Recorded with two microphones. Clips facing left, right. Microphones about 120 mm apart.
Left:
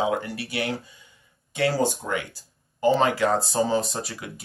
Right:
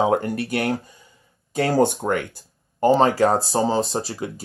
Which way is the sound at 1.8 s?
60° right (ahead or behind).